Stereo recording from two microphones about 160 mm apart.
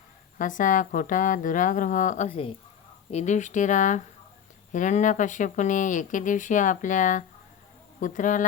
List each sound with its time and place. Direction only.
0.3 s a woman's voice: 55° left (ahead or behind)